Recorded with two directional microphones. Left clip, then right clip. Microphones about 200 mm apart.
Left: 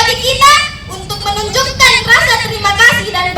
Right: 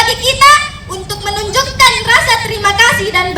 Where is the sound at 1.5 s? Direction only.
20° right (ahead or behind).